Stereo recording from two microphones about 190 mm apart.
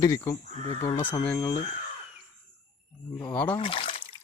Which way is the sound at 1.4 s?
20° left (ahead or behind).